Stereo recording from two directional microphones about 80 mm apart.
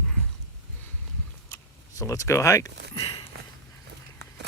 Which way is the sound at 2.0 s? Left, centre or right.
Left.